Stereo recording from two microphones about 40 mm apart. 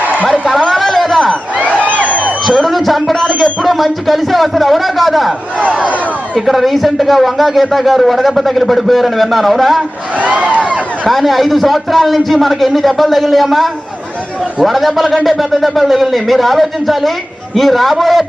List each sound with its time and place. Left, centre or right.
0.7 s a sound: centre
1.5 s a sound: right
2.6 s speech: centre
3.2 s music: centre
3.6 s speech: centre
6.3 s speech: centre
10.5 s speech: right
11.1 s speech: centre